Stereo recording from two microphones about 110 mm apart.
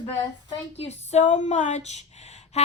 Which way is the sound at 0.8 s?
85° left.